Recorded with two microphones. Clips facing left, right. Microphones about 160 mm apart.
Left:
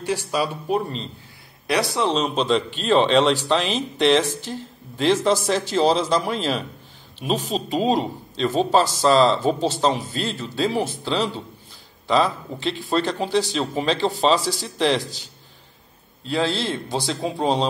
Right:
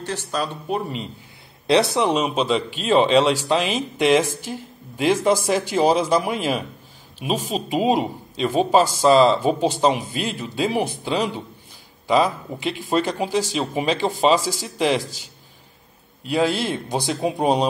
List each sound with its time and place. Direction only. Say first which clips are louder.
0.0 s speech: left 3 dB; 10° left (ahead or behind)
1.7 s speech: right 4 dB; 20° right (ahead or behind)
12.5 s speech: right 1 dB; 10° right (ahead or behind)
16.3 s speech: right 2 dB; 15° right (ahead or behind)